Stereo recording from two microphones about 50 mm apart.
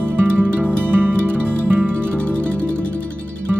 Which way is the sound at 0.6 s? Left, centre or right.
Right.